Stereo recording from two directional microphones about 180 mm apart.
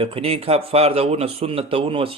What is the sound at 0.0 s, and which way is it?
Speech, 30° right (ahead or behind).